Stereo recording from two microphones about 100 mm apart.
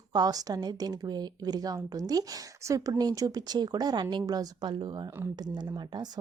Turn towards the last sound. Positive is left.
turn(degrees=-45)  # may be behind; listen again after turning